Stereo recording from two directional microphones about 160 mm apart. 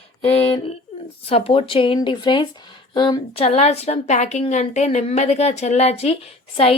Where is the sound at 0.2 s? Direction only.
35° left (ahead or behind).